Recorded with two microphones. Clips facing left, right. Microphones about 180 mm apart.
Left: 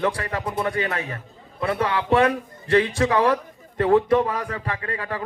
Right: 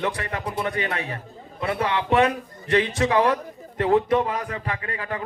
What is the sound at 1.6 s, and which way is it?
A man's voice, 25° right (ahead or behind).